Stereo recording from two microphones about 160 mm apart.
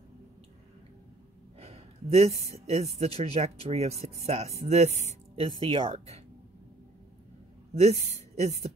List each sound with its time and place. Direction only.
1.6 s a sound: 40° right (ahead or behind)
2.6 s speech: 40° right (ahead or behind)
7.7 s a woman's voice: 40° right (ahead or behind)